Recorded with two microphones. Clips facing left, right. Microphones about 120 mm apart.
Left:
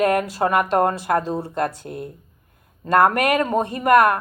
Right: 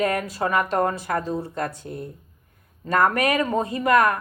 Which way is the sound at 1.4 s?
90° left.